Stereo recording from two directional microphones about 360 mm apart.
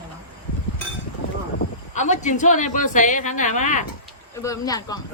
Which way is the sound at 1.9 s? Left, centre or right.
Centre.